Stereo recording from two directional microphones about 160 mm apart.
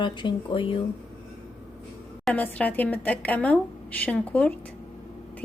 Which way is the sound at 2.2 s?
10° left (ahead or behind).